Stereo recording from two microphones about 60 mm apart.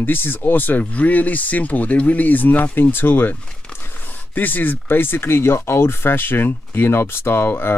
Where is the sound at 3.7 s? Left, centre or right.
Left.